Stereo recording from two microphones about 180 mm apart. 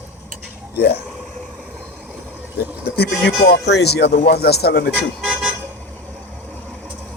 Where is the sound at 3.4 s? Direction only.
70° left (ahead or behind).